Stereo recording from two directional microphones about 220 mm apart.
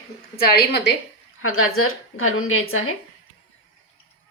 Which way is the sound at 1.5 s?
75° left (ahead or behind).